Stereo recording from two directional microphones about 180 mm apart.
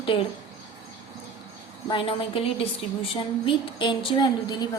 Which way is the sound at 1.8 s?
30° left (ahead or behind).